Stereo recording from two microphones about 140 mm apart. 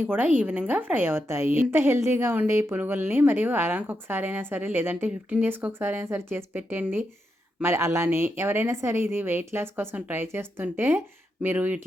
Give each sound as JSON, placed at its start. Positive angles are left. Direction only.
{"t": 0.0, "sound": "a woman's voice", "side_deg": -15}